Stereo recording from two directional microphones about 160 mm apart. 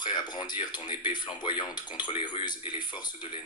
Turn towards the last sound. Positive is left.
turn(degrees=30)  # may be behind; listen again after turning